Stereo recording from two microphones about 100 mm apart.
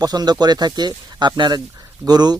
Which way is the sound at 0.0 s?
40° right (ahead or behind).